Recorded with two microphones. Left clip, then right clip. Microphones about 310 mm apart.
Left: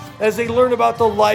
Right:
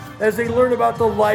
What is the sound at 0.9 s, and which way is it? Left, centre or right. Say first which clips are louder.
Speech: left 2 dB; centre.